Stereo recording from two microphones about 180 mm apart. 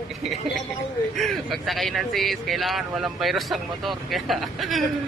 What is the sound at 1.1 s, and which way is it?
Speech, centre (ahead or behind).